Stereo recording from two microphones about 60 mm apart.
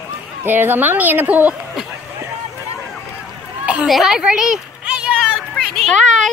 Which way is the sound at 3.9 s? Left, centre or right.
Centre.